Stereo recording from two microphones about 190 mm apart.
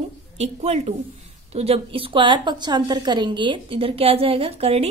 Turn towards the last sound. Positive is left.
turn(degrees=-30)  # may be behind; listen again after turning